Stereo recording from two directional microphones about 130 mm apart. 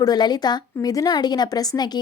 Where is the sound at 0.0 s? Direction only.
30° left (ahead or behind).